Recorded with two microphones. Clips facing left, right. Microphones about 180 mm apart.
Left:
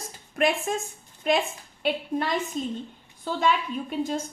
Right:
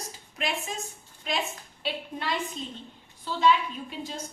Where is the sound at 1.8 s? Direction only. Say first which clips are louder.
Left 6 dB; 45° left (ahead or behind).